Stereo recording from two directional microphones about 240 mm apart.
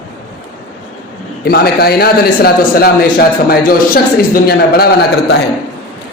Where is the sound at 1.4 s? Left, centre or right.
Left.